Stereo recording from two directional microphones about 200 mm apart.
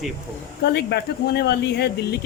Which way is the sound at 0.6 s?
55° left (ahead or behind).